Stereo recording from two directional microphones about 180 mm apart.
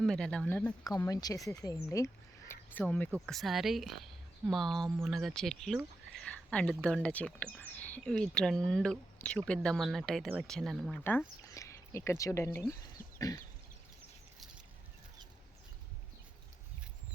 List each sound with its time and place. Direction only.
0.0 s speech: 5° left (ahead or behind)
0.9 s speech: 20° left (ahead or behind); by 11.0 s centre (ahead or behind)
11.0 s speech: 10° left (ahead or behind)
13.1 s a sound: 20° left (ahead or behind)